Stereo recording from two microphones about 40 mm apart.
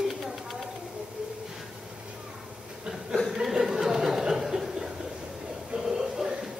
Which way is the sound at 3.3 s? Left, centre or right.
Centre.